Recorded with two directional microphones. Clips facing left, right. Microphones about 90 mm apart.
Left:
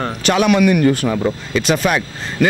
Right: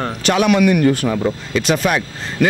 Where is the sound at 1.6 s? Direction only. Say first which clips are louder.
Even; 20° left (ahead or behind).